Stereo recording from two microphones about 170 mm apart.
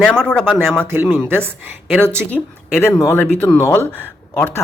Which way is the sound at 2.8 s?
15° left (ahead or behind).